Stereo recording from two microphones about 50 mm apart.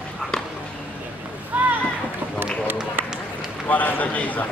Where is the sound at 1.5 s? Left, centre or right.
Right.